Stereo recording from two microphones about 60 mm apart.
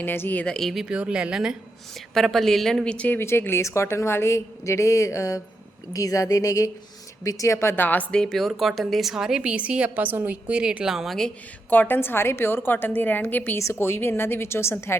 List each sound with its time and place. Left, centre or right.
0.0 s a woman's voice: left
0.4 s speech: centre
0.7 s a woman's voice: centre
2.1 s a woman's voice: centre
2.8 s speech: centre
3.2 s a woman's voice: left
5.9 s speech: left
7.3 s a woman's voice: left
7.8 s a woman's voice: left
8.1 s speech: centre
8.4 s a woman's voice: centre
11.7 s a woman's voice: left